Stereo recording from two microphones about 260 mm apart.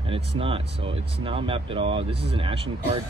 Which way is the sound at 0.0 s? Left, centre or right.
Right.